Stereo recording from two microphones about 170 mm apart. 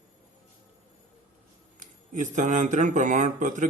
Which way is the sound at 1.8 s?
50° right (ahead or behind).